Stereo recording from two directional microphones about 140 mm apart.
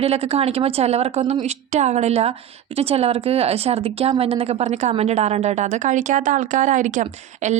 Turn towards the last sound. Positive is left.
turn(degrees=-55)  # may be behind; listen again after turning